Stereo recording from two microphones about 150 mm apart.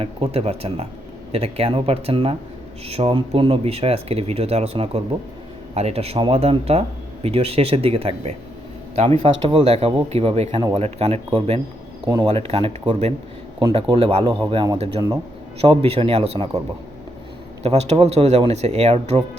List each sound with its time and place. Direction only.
0.0 s speech: 40° right (ahead or behind)
12.0 s speech: 25° right (ahead or behind)
12.3 s speech: 35° right (ahead or behind)
17.6 s speech: 45° right (ahead or behind)